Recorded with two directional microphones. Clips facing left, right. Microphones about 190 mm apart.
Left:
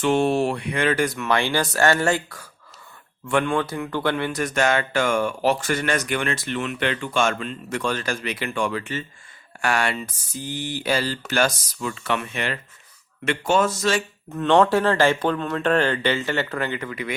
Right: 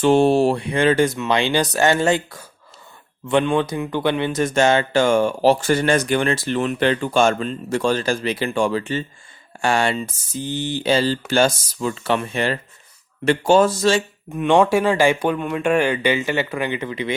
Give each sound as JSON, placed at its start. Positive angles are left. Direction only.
{"t": 0.0, "sound": "speech", "side_deg": -30}
{"t": 14.3, "sound": "speech", "side_deg": -10}